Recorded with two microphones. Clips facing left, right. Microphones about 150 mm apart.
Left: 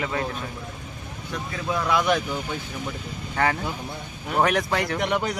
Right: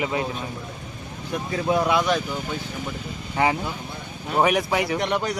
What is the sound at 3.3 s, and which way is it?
Speech, 15° right (ahead or behind).